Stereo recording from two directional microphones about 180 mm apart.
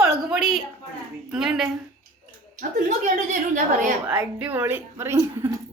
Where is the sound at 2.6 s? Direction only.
45° right (ahead or behind).